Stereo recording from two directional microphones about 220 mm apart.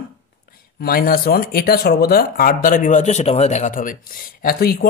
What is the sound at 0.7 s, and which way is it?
Speech, 40° left (ahead or behind).